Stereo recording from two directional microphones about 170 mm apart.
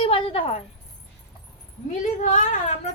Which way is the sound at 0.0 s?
35° left (ahead or behind).